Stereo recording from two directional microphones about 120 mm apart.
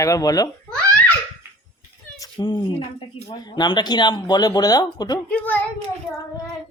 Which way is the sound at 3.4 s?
40° left (ahead or behind).